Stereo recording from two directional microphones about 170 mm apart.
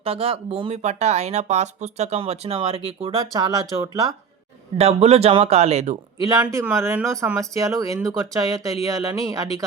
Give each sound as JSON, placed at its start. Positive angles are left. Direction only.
{"t": 0.0, "sound": "speech", "side_deg": -35}
{"t": 4.8, "sound": "speech", "side_deg": -35}
{"t": 6.2, "sound": "speech", "side_deg": -15}